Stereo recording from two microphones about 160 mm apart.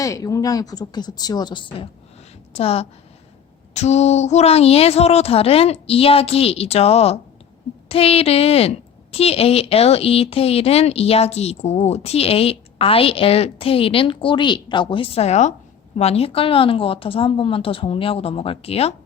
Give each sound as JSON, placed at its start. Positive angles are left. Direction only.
{"t": 0.0, "sound": "a woman's voice", "side_deg": 20}